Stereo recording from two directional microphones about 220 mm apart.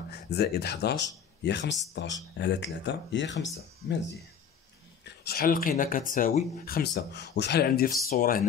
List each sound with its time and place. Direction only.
0.1 s speech: 50° left (ahead or behind)
5.0 s speech: 45° left (ahead or behind)